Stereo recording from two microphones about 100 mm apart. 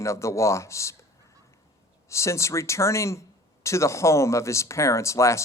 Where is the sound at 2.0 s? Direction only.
30° left (ahead or behind).